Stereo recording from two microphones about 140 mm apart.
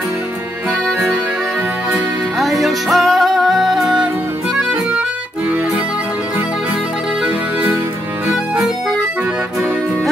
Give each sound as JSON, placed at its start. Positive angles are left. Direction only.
{"t": 2.3, "sound": "music", "side_deg": 0}